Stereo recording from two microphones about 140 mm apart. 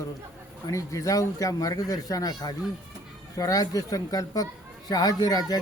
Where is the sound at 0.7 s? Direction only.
20° left (ahead or behind).